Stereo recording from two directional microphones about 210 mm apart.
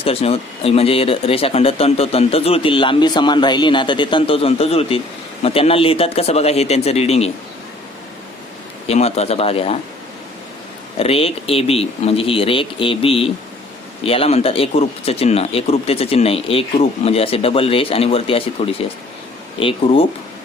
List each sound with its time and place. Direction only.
0.0 s speech: 25° left (ahead or behind)
8.9 s speech: 30° left (ahead or behind)
10.9 s speech: 30° left (ahead or behind)